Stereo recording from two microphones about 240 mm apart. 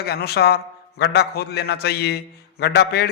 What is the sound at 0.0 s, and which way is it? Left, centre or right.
A man's voice, left.